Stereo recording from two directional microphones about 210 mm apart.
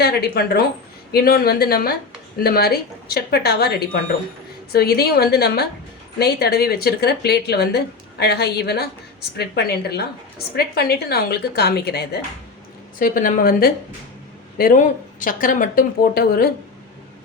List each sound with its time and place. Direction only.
0.0 s a woman's voice: 50° left (ahead or behind)